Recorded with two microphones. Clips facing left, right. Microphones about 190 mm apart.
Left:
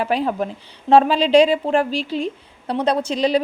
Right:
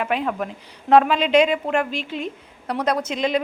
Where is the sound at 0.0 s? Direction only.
35° left (ahead or behind).